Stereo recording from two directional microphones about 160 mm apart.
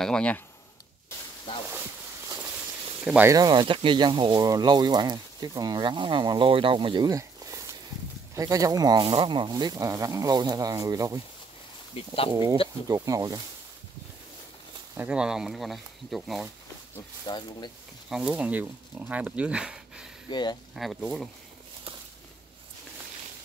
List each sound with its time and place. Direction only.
0.0 s speech: 5° left (ahead or behind)
3.3 s speech: 25° right (ahead or behind)
12.0 s speech: 35° left (ahead or behind)
12.3 s speech: 20° right (ahead or behind)
15.0 s speech: 5° right (ahead or behind)
17.3 s speech: 30° left (ahead or behind)
18.1 s speech: 5° right (ahead or behind)
20.2 s speech: 25° left (ahead or behind)
20.7 s speech: centre (ahead or behind)